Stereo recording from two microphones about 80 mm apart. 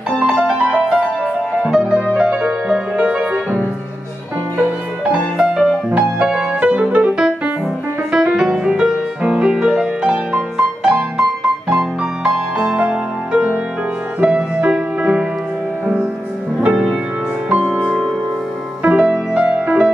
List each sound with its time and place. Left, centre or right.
0.2 s music: centre
5.0 s music: centre
16.6 s music: centre